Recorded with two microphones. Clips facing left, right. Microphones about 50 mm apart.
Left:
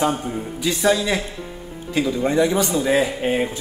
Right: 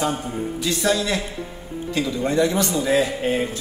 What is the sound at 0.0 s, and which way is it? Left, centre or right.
A man's voice, centre.